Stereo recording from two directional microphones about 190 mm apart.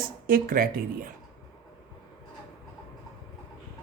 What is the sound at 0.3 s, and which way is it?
Speech, 50° right (ahead or behind).